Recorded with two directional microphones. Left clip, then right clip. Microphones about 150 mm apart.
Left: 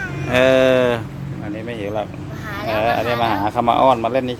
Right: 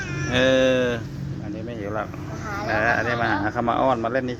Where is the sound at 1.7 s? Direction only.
35° left (ahead or behind).